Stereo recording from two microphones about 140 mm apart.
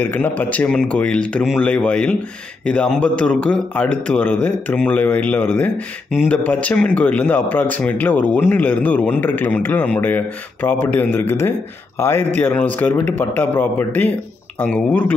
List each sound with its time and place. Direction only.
0.0 s speech: 10° left (ahead or behind)